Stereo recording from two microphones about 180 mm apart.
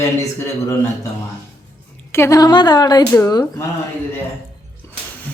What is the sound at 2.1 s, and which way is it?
Speech, 15° left (ahead or behind).